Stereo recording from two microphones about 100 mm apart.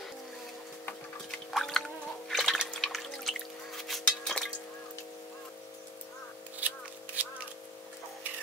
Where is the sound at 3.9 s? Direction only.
5° left (ahead or behind).